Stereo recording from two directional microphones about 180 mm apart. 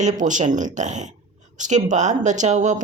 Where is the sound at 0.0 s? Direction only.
45° right (ahead or behind).